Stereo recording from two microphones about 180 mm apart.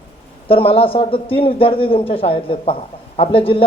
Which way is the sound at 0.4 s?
30° left (ahead or behind).